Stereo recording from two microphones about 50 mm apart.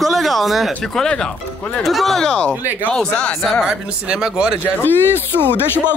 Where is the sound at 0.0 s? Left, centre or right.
Centre.